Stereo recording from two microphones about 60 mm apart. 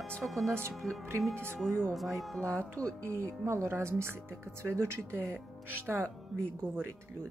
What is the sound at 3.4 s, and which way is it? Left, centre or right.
Speech, right.